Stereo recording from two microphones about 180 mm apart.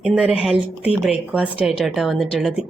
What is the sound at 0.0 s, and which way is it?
A woman's voice, 5° right (ahead or behind).